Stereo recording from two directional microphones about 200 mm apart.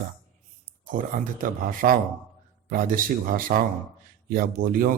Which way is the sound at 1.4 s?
45° right (ahead or behind).